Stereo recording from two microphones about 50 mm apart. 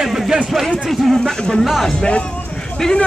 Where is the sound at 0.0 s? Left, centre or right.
Centre.